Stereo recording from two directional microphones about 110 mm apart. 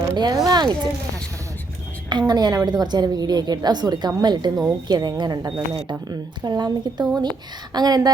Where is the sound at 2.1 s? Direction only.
40° right (ahead or behind).